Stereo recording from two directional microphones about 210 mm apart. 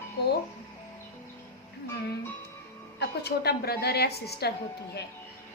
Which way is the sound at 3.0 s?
50° left (ahead or behind).